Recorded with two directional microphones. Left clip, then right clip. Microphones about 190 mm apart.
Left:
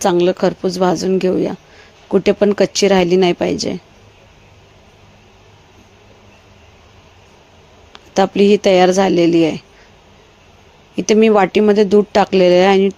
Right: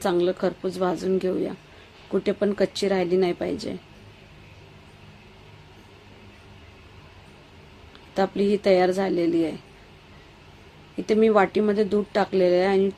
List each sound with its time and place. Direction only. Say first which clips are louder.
0.0 s a woman's voice: left 9 dB; 40° left (ahead or behind)
7.9 s speech: left 10 dB; 40° left (ahead or behind)
10.9 s speech: left 8 dB; 45° left (ahead or behind)